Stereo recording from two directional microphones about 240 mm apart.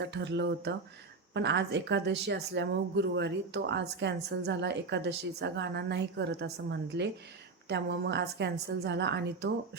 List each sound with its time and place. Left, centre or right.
0.0 s a woman's voice: right